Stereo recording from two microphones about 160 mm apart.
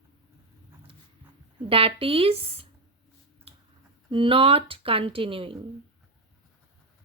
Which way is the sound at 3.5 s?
35° right (ahead or behind).